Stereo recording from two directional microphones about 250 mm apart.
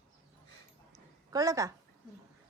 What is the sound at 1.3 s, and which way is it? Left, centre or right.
Speech, centre.